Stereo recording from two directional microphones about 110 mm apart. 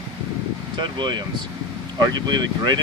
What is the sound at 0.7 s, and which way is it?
Speech, 45° right (ahead or behind).